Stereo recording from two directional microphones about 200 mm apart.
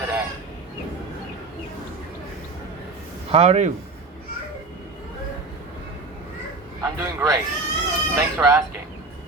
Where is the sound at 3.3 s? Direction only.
30° right (ahead or behind).